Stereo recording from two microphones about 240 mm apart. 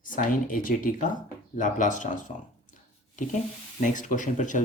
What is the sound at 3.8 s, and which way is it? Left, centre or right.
Speech, left.